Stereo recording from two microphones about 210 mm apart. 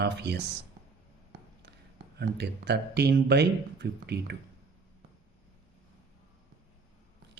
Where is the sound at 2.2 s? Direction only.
55° right (ahead or behind).